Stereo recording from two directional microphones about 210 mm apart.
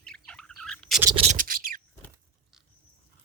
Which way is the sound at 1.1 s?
30° right (ahead or behind).